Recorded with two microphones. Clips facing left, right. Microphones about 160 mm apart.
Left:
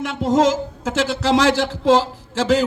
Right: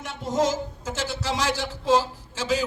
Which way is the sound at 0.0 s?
85° left.